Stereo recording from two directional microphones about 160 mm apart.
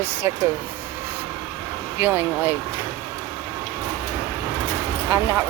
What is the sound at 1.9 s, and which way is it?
Speech, 10° right (ahead or behind).